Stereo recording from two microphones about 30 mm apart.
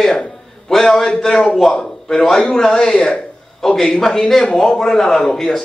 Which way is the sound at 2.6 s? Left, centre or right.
Centre.